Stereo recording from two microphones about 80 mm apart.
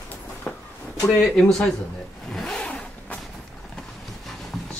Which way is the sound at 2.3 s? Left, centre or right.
Centre.